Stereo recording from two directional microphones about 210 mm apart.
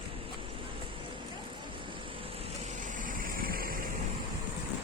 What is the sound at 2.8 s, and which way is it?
Vehicle, 40° right (ahead or behind).